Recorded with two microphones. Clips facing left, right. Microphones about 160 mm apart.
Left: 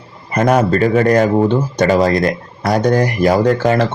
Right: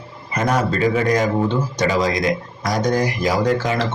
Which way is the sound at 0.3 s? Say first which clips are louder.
Left 7 dB; 55° left (ahead or behind).